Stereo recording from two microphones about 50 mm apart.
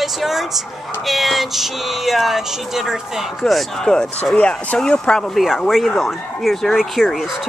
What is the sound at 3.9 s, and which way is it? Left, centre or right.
Speech, centre.